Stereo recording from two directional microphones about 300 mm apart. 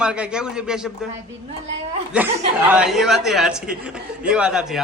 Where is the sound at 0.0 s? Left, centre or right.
Centre.